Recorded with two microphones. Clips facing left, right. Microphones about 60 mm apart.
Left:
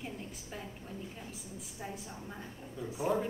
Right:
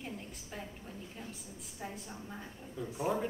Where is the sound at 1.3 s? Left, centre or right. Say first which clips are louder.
Left 2 dB; centre.